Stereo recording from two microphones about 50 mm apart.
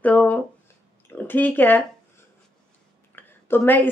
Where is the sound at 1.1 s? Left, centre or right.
Left.